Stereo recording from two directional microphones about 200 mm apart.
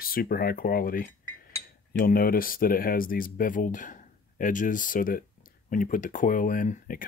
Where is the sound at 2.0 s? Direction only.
45° left (ahead or behind).